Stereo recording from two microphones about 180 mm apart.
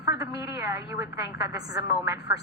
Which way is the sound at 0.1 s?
20° right (ahead or behind).